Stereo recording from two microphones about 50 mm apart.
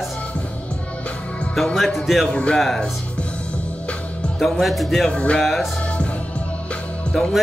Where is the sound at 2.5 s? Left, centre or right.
Centre.